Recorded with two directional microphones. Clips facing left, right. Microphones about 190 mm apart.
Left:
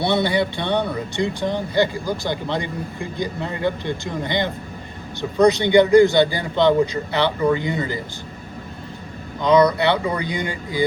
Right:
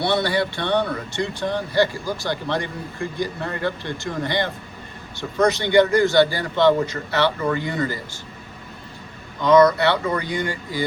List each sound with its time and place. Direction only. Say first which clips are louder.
0.0 s a man's voice: left 2 dB; 20° left (ahead or behind)
9.4 s a man's voice: right 1 dB; 20° left (ahead or behind)